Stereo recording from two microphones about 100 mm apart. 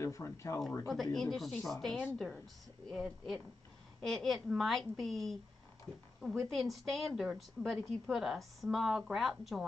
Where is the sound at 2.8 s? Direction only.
Centre (ahead or behind).